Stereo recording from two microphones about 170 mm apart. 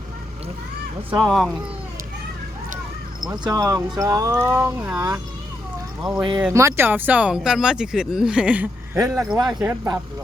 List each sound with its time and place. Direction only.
1.2 s speech: centre (ahead or behind)
3.2 s speech: 20° right (ahead or behind)
6.0 s speech: centre (ahead or behind)
6.5 s speech: 15° right (ahead or behind)
9.3 s speech: 5° right (ahead or behind)